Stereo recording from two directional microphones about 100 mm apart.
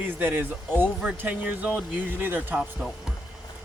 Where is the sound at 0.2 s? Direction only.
20° right (ahead or behind).